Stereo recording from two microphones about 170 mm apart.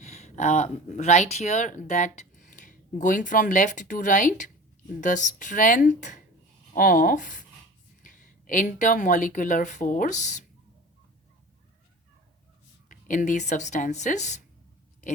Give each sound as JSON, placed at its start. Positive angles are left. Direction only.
{"t": 0.0, "sound": "speech", "side_deg": 40}
{"t": 12.9, "sound": "speech", "side_deg": 50}